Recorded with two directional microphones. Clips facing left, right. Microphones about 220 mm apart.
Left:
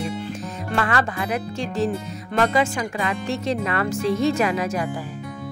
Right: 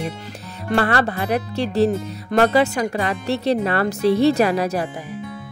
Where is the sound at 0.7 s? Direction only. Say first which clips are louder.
Right 4 dB; 35° right (ahead or behind).